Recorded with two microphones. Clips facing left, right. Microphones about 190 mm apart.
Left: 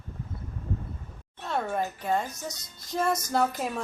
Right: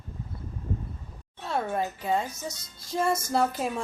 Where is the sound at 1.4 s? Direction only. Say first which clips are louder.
Right 1 dB; 5° right (ahead or behind).